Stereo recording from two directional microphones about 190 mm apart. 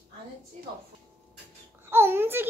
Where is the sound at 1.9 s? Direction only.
10° right (ahead or behind).